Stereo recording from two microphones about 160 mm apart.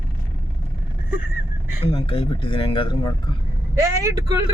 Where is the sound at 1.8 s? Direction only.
35° left (ahead or behind).